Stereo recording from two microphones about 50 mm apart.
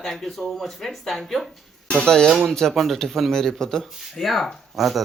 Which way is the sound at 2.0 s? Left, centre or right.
Centre.